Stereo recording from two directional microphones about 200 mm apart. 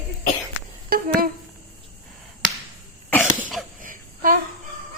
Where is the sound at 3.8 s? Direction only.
45° right (ahead or behind).